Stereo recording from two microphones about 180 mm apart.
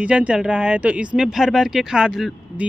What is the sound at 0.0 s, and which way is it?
Speech, 5° right (ahead or behind).